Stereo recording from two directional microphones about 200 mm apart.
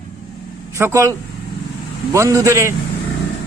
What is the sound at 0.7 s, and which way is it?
Speech, 15° right (ahead or behind).